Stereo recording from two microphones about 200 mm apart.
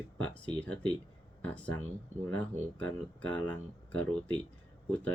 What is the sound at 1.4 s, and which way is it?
Speech, 5° left (ahead or behind).